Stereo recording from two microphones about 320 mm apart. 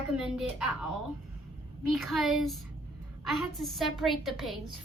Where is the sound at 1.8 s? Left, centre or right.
Centre.